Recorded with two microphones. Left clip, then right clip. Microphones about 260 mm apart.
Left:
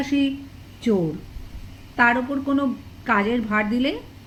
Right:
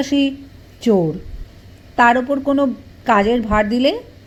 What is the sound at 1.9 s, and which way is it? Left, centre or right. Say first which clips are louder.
Speech: right 6 dB; right.